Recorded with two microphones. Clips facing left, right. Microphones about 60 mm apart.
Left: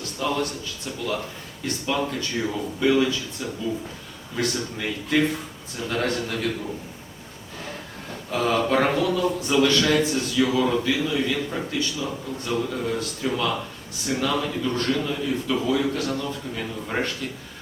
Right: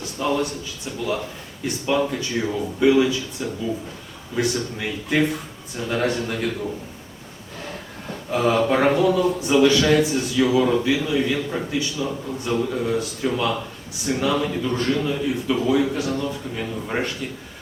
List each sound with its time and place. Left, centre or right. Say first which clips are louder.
0.2 s a man's voice: right 3 dB; centre
4.5 s a man's voice: right 2 dB; centre
8.3 s a man's voice: right 3 dB; centre